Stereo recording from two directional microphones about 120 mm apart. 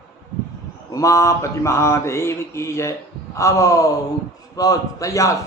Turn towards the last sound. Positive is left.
turn(degrees=25)  # may be behind; listen again after turning